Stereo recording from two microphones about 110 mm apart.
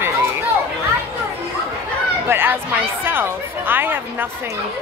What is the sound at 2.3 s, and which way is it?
Speech, 20° right (ahead or behind).